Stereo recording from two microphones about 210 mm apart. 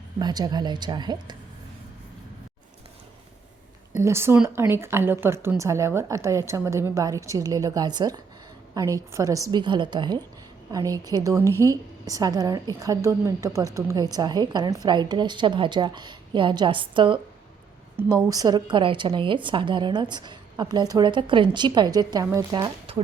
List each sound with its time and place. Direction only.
0.2 s a woman's voice: 20° right (ahead or behind)
3.9 s a woman's voice: 10° right (ahead or behind)